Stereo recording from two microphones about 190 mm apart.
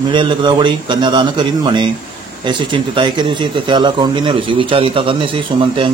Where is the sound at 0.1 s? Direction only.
25° right (ahead or behind).